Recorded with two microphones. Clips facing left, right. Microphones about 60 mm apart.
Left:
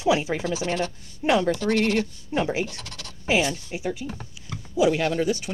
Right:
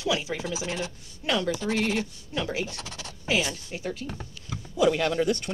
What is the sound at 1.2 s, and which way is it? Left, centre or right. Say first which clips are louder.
Speech: left 6 dB; left.